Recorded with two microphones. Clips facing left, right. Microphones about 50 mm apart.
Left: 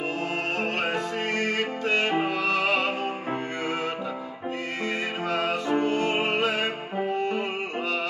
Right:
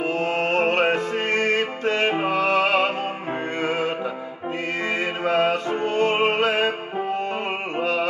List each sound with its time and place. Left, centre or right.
0.0 s music: right
7.8 s music: right